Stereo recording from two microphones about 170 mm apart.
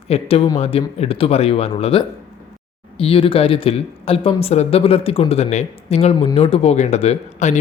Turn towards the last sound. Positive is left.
turn(degrees=40)  # may be behind; listen again after turning